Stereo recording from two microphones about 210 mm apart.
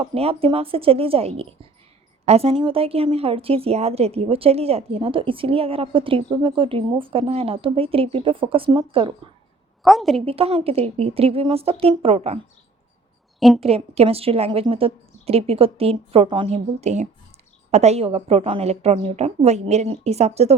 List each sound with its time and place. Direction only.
0.0 s a woman's voice: 30° right (ahead or behind)
9.8 s a woman's voice: centre (ahead or behind)
10.2 s a woman's voice: 25° right (ahead or behind)
13.6 s a woman's voice: 30° right (ahead or behind)